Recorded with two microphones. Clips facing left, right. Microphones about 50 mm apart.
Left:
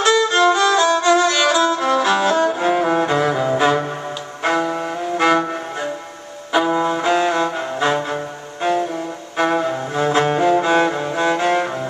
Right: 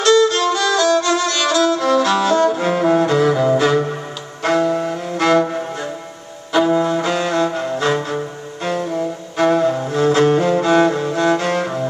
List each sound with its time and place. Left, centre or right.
0.0 s violin: centre
4.4 s music: centre
8.6 s cello: centre